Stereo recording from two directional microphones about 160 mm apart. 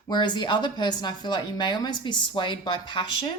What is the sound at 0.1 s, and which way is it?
A woman's voice, 30° left (ahead or behind).